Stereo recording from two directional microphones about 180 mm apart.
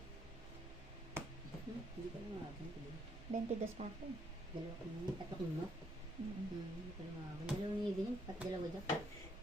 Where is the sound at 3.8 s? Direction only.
35° right (ahead or behind).